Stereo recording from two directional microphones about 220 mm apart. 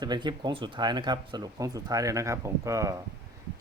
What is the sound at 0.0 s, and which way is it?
Speech, 20° right (ahead or behind).